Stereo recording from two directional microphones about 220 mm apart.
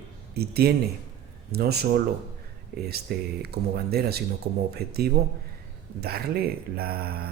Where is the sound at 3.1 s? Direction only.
45° right (ahead or behind).